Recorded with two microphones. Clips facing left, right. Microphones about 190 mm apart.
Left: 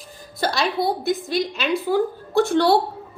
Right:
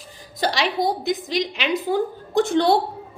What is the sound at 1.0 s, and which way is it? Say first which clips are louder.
A woman's voice: left 1 dB; 20° right (ahead or behind).